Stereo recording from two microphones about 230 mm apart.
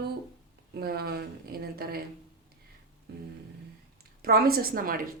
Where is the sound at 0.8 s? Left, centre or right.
Right.